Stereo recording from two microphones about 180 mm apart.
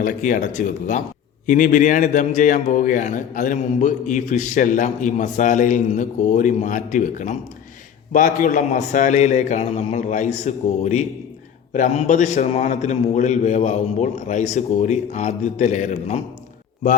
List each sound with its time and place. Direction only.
0.0 s a man's voice: 45° left (ahead or behind)